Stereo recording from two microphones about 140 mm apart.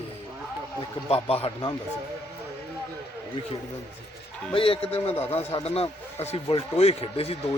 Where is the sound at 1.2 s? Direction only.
45° left (ahead or behind).